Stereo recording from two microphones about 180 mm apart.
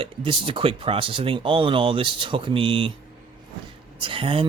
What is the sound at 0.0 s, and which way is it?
Speech, 30° right (ahead or behind).